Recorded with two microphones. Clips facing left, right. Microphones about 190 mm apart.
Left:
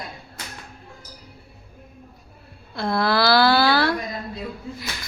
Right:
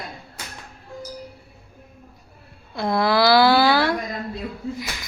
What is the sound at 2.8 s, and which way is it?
Speech, 15° right (ahead or behind).